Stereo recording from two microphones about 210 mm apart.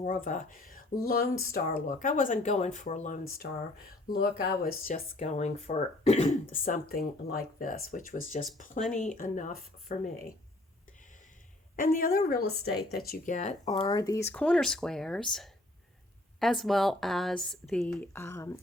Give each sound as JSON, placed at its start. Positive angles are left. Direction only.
{"t": 0.0, "sound": "speech", "side_deg": 40}
{"t": 11.8, "sound": "speech", "side_deg": 40}
{"t": 13.7, "sound": "speech", "side_deg": 20}